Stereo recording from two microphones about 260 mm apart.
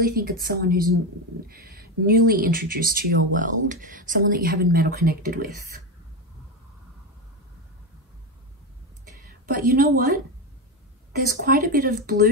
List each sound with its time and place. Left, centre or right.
0.0 s speech: right
9.5 s speech: right
11.2 s speech: right